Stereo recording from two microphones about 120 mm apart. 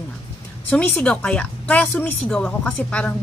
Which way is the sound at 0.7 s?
10° left (ahead or behind).